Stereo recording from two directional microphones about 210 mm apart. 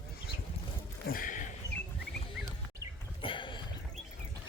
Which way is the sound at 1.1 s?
40° left (ahead or behind).